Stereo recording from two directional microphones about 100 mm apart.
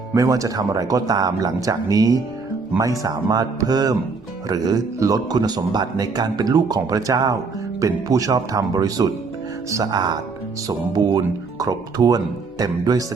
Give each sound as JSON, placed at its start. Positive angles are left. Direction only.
{"t": 0.1, "sound": "speech", "side_deg": -35}